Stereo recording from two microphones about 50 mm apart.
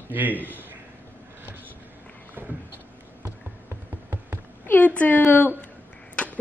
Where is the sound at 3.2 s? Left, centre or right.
Right.